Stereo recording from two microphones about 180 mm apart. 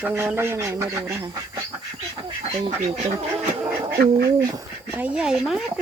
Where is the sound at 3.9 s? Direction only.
60° right (ahead or behind).